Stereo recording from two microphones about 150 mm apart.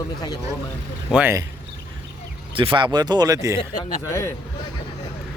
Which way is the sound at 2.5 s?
35° right (ahead or behind).